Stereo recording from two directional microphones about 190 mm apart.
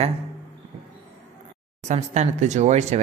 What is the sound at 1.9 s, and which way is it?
Speech, 35° right (ahead or behind).